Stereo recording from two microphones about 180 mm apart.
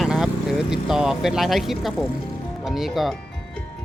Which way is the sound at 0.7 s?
5° right (ahead or behind).